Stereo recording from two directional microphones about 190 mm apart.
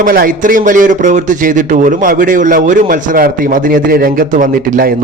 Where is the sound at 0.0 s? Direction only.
50° right (ahead or behind).